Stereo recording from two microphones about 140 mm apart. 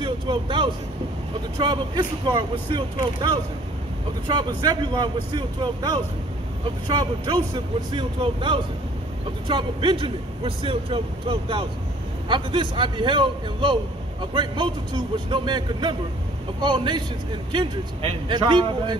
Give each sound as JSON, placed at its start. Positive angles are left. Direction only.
{"t": 0.0, "sound": "a man's voice", "side_deg": -35}